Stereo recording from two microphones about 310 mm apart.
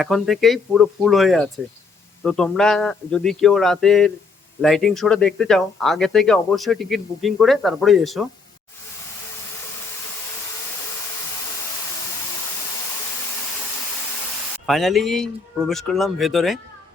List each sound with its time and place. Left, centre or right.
0.0 s speech: centre
14.7 s speech: centre